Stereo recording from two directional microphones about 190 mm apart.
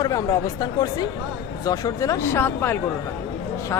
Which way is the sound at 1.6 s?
15° left (ahead or behind).